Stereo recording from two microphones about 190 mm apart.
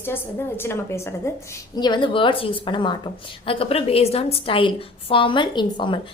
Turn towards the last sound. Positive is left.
turn(degrees=25)  # may be behind; listen again after turning